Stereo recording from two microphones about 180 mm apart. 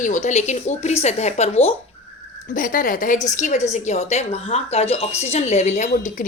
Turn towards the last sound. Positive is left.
turn(degrees=40)  # may be behind; listen again after turning